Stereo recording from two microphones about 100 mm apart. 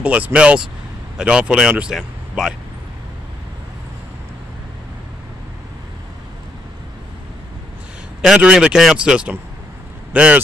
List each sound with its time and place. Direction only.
0.0 s speech: 10° right (ahead or behind)
8.2 s speech: 5° right (ahead or behind)